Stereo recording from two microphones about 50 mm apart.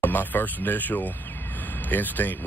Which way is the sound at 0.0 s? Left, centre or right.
Left.